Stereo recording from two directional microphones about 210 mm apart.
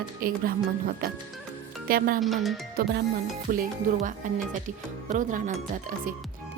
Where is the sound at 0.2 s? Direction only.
45° right (ahead or behind).